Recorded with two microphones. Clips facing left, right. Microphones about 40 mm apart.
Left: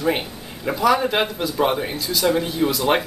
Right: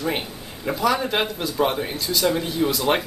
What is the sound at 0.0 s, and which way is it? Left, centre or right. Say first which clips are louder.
Speech: left 4 dB; centre.